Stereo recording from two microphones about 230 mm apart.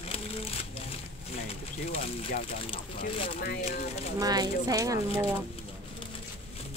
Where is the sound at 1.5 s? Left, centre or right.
Left.